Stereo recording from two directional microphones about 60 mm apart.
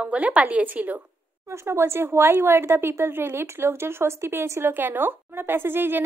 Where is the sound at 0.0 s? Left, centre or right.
Right.